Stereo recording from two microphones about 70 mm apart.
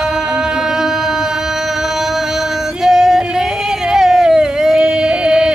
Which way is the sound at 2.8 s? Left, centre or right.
Centre.